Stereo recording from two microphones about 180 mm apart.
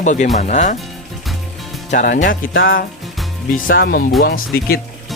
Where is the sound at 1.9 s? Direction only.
45° left (ahead or behind).